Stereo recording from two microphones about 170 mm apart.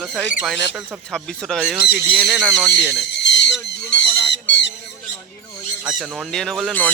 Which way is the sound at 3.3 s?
90° left.